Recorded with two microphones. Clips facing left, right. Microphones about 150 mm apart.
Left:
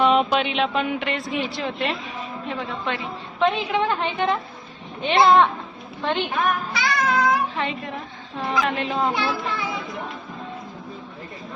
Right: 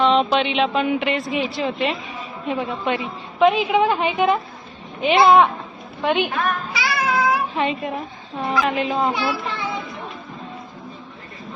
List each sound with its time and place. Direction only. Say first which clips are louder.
0.0 s speech: right 1 dB; 10° left (ahead or behind)
2.5 s a woman's voice: right 6 dB; 15° right (ahead or behind)
6.7 s music: right 2 dB; 10° right (ahead or behind)
7.5 s a woman's voice: right 5 dB; 15° right (ahead or behind)
8.5 s speech: right 3 dB; 5° right (ahead or behind)